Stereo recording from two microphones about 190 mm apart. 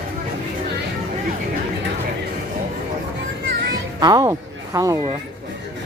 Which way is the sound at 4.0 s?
20° right (ahead or behind).